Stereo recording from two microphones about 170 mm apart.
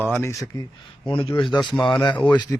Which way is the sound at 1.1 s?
30° left (ahead or behind).